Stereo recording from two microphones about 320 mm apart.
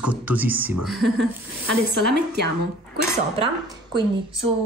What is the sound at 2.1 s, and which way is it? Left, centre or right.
Speech, right.